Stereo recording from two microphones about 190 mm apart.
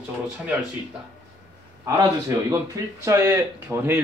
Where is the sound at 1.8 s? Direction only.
15° right (ahead or behind).